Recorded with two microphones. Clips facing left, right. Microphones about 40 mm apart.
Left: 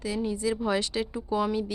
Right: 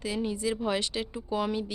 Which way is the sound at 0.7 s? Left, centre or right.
Centre.